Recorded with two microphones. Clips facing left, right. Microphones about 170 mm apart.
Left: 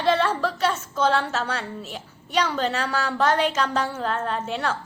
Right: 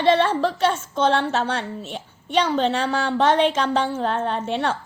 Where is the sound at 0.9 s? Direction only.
25° right (ahead or behind).